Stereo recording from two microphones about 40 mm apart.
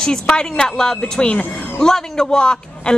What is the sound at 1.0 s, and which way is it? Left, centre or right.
Speech, left.